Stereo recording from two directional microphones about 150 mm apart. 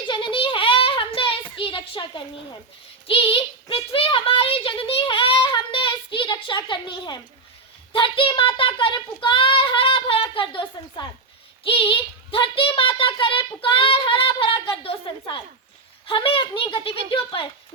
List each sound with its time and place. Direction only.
0.1 s a sound: 35° left (ahead or behind)
3.1 s a child's voice: 35° left (ahead or behind)
3.9 s child singing: 35° left (ahead or behind)
11.6 s a child's voice: 35° left (ahead or behind)